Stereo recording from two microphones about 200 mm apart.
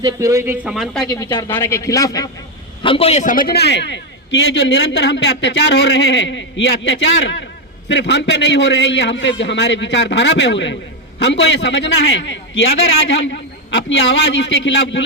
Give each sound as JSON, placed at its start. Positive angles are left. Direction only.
{"t": 0.0, "sound": "speech", "side_deg": -15}
{"t": 1.0, "sound": "a man's voice", "side_deg": 20}